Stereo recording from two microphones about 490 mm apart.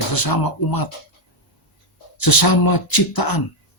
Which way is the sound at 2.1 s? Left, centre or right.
Left.